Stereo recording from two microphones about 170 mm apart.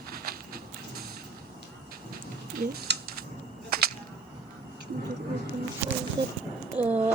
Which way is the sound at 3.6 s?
65° right (ahead or behind).